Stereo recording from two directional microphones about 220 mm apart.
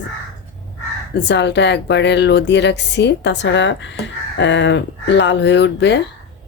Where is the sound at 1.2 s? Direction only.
50° left (ahead or behind).